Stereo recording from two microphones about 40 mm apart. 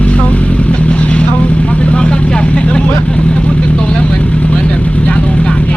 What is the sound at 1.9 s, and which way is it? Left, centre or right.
Vehicle, left.